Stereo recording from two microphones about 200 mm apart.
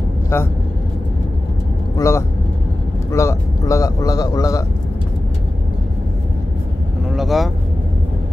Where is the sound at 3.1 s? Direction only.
15° left (ahead or behind).